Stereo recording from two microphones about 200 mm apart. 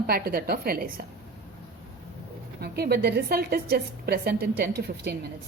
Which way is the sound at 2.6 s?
50° right (ahead or behind).